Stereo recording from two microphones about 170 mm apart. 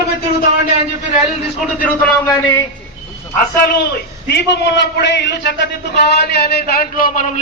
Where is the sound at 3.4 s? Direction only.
60° left (ahead or behind).